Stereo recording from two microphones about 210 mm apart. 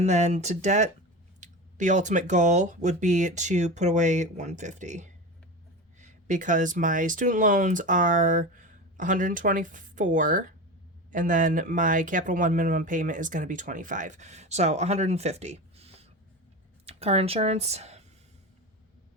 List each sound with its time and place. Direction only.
0.0 s speech: 30° right (ahead or behind)